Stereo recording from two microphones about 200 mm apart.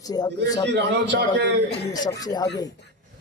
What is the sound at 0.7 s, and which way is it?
Speech, 60° right (ahead or behind).